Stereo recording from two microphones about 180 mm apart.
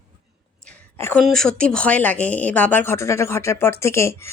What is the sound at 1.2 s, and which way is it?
Speech, centre (ahead or behind).